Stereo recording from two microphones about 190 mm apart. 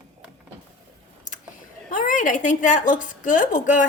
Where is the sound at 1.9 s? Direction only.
45° left (ahead or behind).